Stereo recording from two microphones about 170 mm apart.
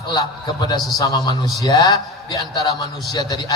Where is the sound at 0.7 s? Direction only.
25° left (ahead or behind).